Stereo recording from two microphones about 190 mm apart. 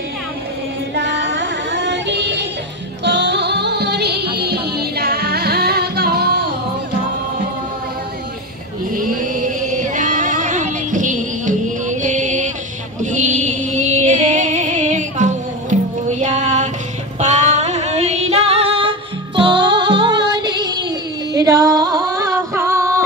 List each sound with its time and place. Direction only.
0.9 s music: 70° right (ahead or behind)
8.9 s chant: 45° right (ahead or behind)
13.0 s music: 40° right (ahead or behind); by 23.0 s 15° right (ahead or behind)